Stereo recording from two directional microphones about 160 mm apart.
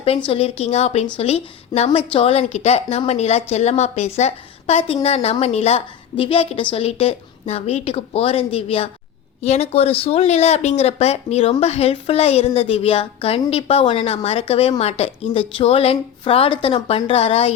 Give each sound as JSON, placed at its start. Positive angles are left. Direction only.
{"t": 0.3, "sound": "a woman's voice", "side_deg": 40}